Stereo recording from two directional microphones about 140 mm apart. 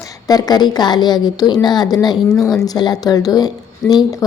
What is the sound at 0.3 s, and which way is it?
A woman's voice, 30° left (ahead or behind).